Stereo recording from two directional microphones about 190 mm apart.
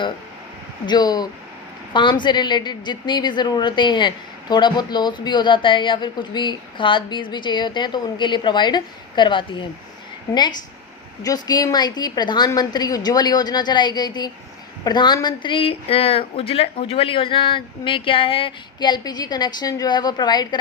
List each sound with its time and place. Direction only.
0.9 s a woman's voice: 20° left (ahead or behind)
11.4 s a woman's voice: 20° left (ahead or behind)